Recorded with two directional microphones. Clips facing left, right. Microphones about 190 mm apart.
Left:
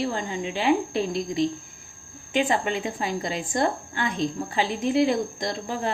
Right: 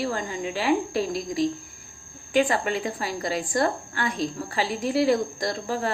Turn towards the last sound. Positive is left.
turn(degrees=20)  # may be behind; listen again after turning